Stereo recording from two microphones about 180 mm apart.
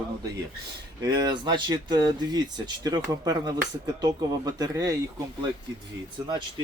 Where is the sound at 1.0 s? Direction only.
20° right (ahead or behind).